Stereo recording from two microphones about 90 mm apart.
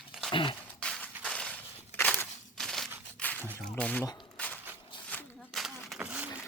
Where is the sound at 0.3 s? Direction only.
70° left (ahead or behind).